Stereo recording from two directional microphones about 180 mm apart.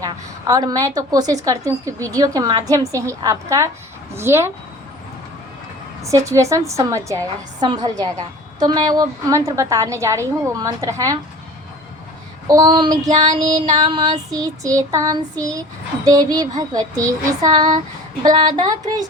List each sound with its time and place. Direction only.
0.0 s a woman's voice: 20° right (ahead or behind)
6.0 s a woman's voice: 15° right (ahead or behind)
12.5 s a woman's voice: 20° right (ahead or behind)